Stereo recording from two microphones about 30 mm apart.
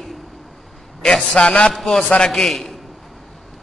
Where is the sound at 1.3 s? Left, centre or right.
Left.